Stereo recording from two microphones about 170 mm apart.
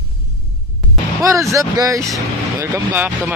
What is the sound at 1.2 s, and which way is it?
Speech, 15° right (ahead or behind).